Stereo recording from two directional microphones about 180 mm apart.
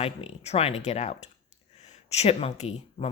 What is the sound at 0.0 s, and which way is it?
Speech, 35° left (ahead or behind).